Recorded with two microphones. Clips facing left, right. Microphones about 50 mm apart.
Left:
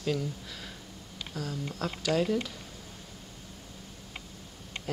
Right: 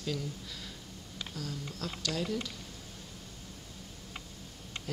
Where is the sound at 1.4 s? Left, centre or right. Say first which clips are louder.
Left 6 dB; centre.